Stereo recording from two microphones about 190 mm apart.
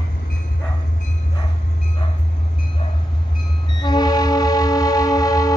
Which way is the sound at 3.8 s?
20° left (ahead or behind).